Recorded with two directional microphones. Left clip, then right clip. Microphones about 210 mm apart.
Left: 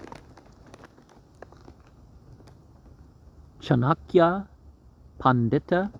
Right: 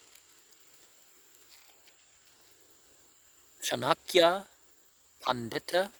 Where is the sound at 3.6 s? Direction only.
25° right (ahead or behind).